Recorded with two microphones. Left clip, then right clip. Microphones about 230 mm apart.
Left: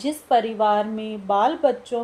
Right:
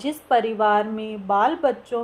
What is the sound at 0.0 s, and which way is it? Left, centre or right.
A woman's voice, centre.